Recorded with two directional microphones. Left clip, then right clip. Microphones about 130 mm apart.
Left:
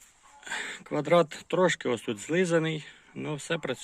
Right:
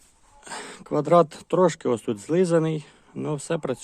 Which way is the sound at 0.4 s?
15° right (ahead or behind).